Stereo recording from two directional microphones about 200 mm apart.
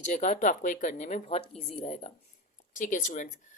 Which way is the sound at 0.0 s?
35° left (ahead or behind).